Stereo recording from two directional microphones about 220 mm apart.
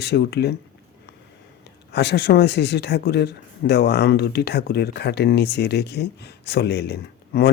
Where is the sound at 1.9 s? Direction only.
50° left (ahead or behind).